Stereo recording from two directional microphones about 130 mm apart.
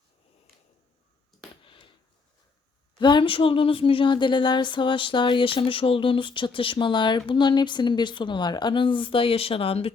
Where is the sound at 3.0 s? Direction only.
40° left (ahead or behind).